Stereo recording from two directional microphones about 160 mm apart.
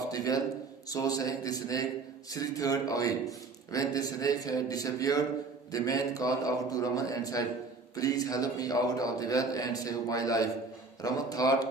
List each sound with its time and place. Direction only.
0.1 s a man's voice: 25° left (ahead or behind)